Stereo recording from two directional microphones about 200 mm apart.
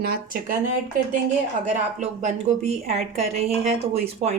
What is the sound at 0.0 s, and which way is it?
Speech, 50° right (ahead or behind).